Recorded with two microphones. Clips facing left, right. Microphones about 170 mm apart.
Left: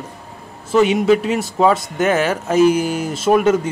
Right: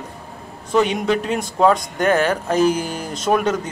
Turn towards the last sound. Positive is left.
turn(degrees=10)  # may be behind; listen again after turning